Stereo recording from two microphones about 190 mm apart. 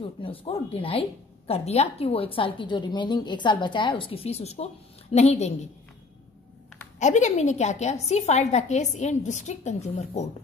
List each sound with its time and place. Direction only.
0.0 s a woman's voice: 30° left (ahead or behind)
7.0 s a woman's voice: 40° left (ahead or behind)